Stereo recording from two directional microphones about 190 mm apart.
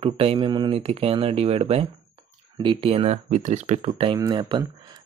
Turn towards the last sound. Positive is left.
turn(degrees=-25)  # may be behind; listen again after turning